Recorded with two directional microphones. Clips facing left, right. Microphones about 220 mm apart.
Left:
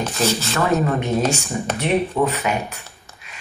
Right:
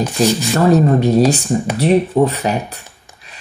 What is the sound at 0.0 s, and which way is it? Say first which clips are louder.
Speech: right 6 dB; 15° right (ahead or behind).